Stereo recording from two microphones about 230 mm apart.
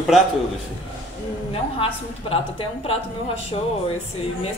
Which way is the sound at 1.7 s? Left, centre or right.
Left.